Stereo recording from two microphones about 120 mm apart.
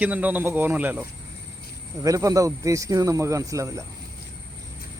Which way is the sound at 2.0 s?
30° right (ahead or behind).